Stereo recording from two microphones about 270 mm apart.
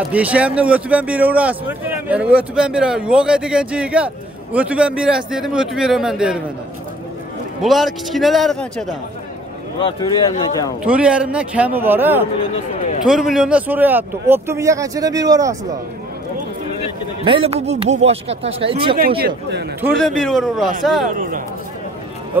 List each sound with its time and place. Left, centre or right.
0.1 s a man's voice: centre
7.6 s a man's voice: centre
9.8 s a man's voice: centre
10.8 s a man's voice: centre
17.2 s speech: centre
18.9 s speech: right
19.8 s a man's voice: centre